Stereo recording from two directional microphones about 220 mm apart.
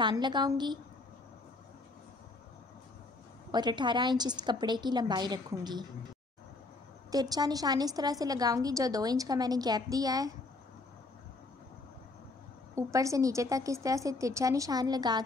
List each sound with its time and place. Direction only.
0.0 s a woman's voice: 20° right (ahead or behind)
3.5 s a woman's voice: 20° right (ahead or behind)
7.1 s a woman's voice: 15° right (ahead or behind)
12.7 s a woman's voice: 15° right (ahead or behind)